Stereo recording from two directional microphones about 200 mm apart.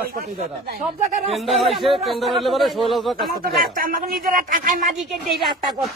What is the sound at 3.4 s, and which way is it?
Speech, 45° right (ahead or behind).